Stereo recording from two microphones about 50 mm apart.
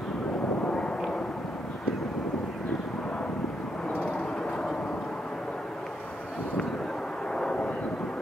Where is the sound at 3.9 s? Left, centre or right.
Centre.